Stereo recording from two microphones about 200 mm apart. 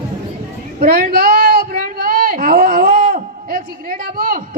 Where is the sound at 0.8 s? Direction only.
50° right (ahead or behind).